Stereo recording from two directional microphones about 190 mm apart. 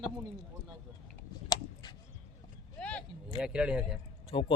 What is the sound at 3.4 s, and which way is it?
Speech, 5° right (ahead or behind).